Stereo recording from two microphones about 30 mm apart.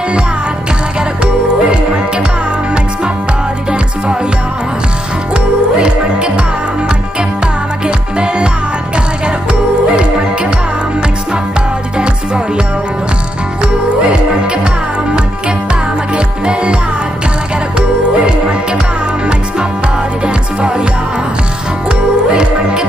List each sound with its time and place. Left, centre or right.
1.2 s music: right
5.3 s music: right
7.8 s music: right
15.1 s music: right
17.7 s music: right
20.2 s music: right
21.8 s music: right